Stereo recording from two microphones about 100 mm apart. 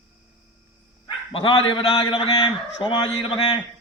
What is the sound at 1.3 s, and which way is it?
A man's voice, 65° left (ahead or behind).